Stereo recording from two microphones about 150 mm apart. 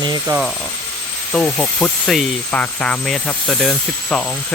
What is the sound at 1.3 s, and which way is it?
Speech, 5° left (ahead or behind).